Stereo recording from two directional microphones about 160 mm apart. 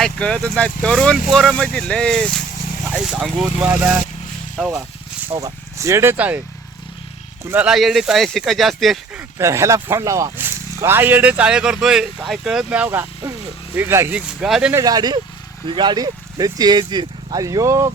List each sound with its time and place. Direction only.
0.0 s speech: 5° left (ahead or behind)
5.4 s speech: 20° right (ahead or behind)
7.5 s speech: 5° right (ahead or behind)
9.4 s speech: 20° right (ahead or behind)
14.7 s speech: 20° right (ahead or behind)